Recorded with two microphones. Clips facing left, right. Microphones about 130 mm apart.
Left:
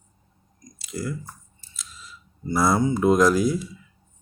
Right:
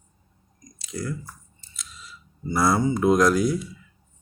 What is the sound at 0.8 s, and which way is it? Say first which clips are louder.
Chewing: left 1 dB; 5° left (ahead or behind).